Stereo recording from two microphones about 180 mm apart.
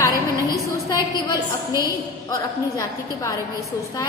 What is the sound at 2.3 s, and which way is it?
A woman's voice, 20° left (ahead or behind).